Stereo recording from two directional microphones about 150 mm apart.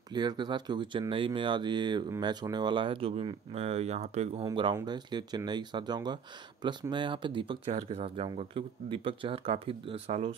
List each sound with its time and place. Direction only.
0.1 s speech: 30° right (ahead or behind); by 4.5 s 45° right (ahead or behind)
4.5 s speech: 30° right (ahead or behind)